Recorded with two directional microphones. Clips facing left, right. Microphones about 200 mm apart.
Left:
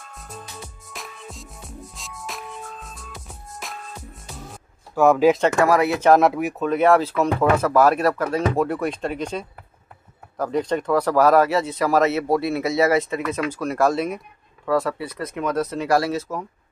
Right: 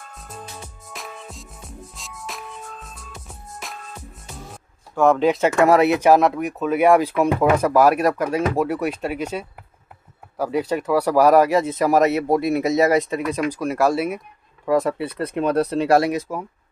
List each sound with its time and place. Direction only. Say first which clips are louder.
0.1 s music: even; centre (ahead or behind)
5.7 s speech: right 3 dB; 20° right (ahead or behind)
6.0 s speech: even; centre (ahead or behind)
6.7 s speech: right 2 dB; 10° right (ahead or behind)
14.7 s speech: right 2 dB; 20° right (ahead or behind)